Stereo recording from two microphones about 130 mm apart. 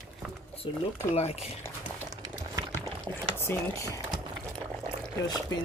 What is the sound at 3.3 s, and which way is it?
Speech, 20° left (ahead or behind).